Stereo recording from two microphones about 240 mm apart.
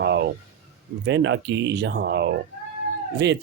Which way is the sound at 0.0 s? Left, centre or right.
Right.